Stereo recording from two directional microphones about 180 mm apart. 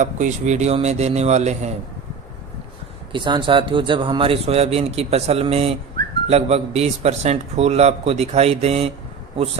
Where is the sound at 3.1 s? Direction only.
25° right (ahead or behind).